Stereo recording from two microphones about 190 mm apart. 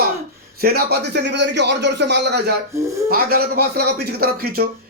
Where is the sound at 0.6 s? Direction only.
55° right (ahead or behind).